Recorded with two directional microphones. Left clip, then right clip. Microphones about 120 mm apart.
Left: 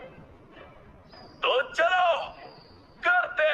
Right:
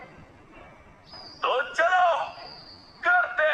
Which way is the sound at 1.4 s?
35° left (ahead or behind).